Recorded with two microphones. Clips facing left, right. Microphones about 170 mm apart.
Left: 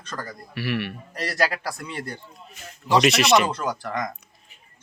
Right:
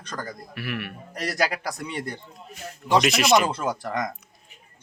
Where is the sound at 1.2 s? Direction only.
10° right (ahead or behind).